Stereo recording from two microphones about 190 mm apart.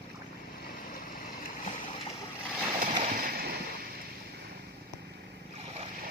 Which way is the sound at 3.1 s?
50° right (ahead or behind).